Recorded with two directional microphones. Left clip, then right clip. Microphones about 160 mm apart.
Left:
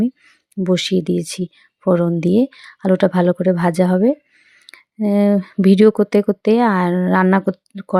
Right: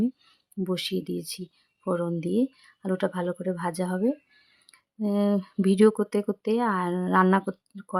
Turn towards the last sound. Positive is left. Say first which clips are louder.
# left 13 dB
turn(degrees=30)  # may be behind; listen again after turning